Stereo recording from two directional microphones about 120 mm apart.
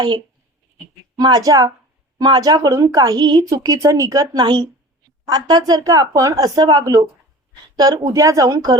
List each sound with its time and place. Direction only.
1.2 s a woman's voice: 30° right (ahead or behind)